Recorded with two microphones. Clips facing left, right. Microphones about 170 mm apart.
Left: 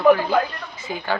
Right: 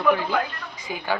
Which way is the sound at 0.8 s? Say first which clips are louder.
Left 1 dB; 15° right (ahead or behind).